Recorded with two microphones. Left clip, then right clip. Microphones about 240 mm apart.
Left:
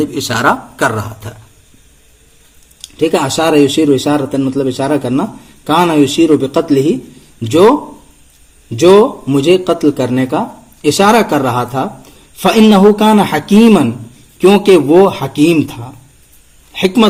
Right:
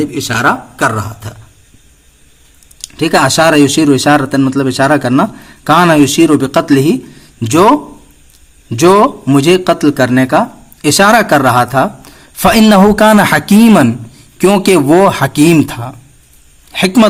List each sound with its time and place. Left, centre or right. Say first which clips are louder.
0.0 s speech: right 1 dB; centre
3.2 s a man's voice: right 4 dB; right
8.7 s a man's voice: even; right